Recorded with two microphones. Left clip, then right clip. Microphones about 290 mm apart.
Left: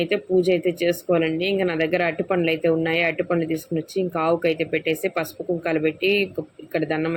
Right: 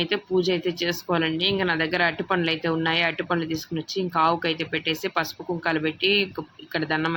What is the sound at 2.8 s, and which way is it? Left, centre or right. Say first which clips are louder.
Speech: left 1 dB; right.